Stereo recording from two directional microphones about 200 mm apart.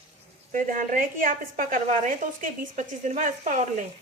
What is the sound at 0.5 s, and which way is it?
A woman's voice, 40° right (ahead or behind).